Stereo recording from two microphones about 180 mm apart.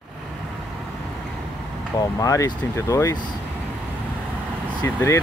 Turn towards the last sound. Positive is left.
turn(degrees=15)  # may be behind; listen again after turning